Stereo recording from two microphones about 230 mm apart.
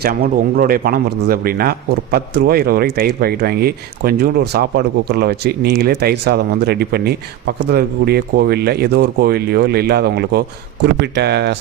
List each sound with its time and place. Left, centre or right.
0.0 s a man's voice: right